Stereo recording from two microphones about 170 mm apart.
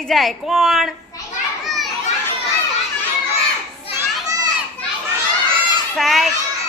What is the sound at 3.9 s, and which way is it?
Children playing, 20° right (ahead or behind).